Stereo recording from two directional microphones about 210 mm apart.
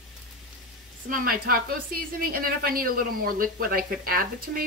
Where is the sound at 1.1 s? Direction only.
45° right (ahead or behind).